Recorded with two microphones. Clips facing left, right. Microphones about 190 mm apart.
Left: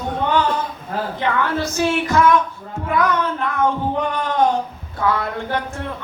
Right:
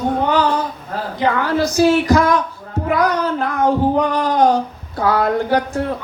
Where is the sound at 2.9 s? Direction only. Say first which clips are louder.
Right 2 dB; 40° right (ahead or behind).